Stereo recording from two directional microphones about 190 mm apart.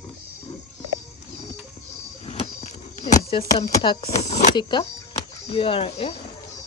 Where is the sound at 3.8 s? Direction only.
25° left (ahead or behind).